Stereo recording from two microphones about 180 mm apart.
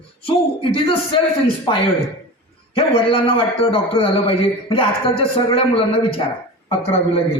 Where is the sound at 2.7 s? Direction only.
30° left (ahead or behind).